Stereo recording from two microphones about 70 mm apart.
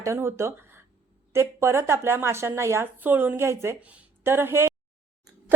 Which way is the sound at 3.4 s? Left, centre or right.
Right.